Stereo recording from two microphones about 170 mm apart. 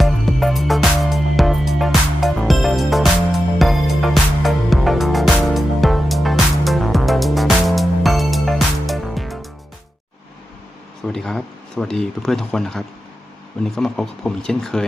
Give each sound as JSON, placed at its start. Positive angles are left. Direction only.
{"t": 0.0, "sound": "music", "side_deg": 0}
{"t": 11.0, "sound": "speech", "side_deg": 5}